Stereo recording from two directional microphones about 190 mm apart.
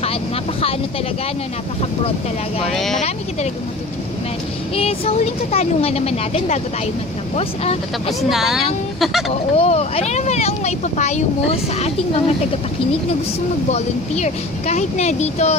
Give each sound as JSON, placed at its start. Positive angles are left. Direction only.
{"t": 2.7, "sound": "a woman's voice", "side_deg": 0}
{"t": 4.7, "sound": "speech", "side_deg": 30}
{"t": 8.2, "sound": "a woman's voice", "side_deg": 0}
{"t": 9.3, "sound": "speech", "side_deg": 30}
{"t": 13.7, "sound": "speech", "side_deg": 35}